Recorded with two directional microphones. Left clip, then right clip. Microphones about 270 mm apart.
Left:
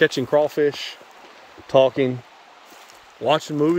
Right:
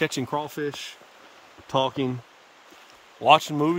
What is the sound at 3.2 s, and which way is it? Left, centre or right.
Speech, centre.